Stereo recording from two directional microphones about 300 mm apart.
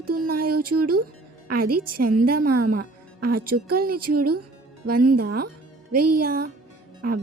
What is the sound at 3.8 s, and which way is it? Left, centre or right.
Speech, right.